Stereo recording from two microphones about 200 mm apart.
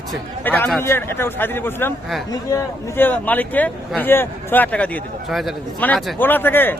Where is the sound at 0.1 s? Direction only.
10° left (ahead or behind).